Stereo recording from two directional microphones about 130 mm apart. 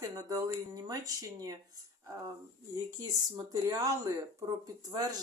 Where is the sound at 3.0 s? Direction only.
30° right (ahead or behind).